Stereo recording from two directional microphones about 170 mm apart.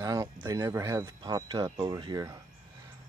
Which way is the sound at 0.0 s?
20° right (ahead or behind).